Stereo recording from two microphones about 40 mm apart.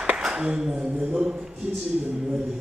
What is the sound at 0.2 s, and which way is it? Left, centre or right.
Speech, centre.